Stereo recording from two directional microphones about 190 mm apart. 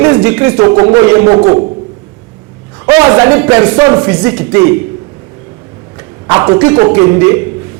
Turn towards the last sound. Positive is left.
turn(degrees=-15)  # may be behind; listen again after turning